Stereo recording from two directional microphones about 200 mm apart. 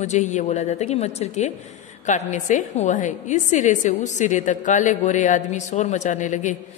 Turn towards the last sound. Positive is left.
turn(degrees=40)  # may be behind; listen again after turning